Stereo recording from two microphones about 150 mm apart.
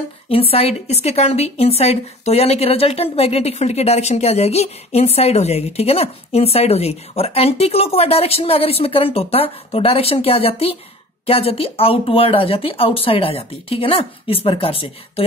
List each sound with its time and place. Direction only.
0.3 s speech: 40° left (ahead or behind)